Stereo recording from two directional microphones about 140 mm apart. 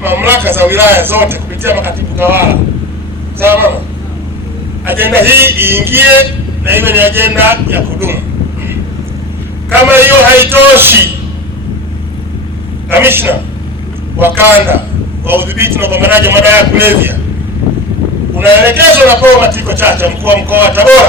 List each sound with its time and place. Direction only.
0.0 s a man's voice: 15° right (ahead or behind)
4.9 s a man's voice: 15° right (ahead or behind)
9.9 s a man's voice: 15° right (ahead or behind)
12.9 s a man's voice: 15° right (ahead or behind)
18.3 s a man's voice: 15° right (ahead or behind)